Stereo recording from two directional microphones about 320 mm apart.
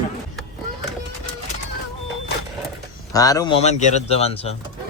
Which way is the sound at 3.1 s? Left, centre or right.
Centre.